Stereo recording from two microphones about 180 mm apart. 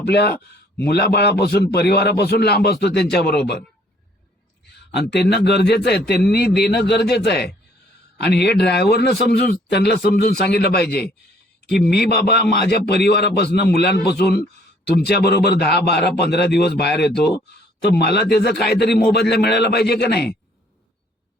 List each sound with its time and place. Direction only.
0.0 s speech: 65° left (ahead or behind)
4.9 s speech: 65° left (ahead or behind)